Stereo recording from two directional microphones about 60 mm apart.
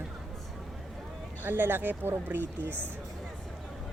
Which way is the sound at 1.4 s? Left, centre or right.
Right.